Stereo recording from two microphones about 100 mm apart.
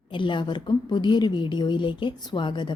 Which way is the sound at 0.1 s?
55° left (ahead or behind).